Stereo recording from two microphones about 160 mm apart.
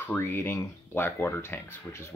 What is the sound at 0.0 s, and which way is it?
Speech, 15° left (ahead or behind).